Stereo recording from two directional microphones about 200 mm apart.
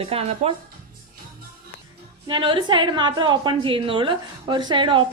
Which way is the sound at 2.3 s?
25° right (ahead or behind).